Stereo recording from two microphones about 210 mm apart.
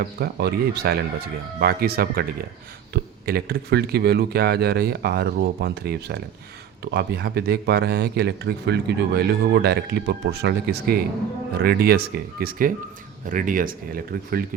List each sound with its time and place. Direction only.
0.0 s speech: 50° right (ahead or behind)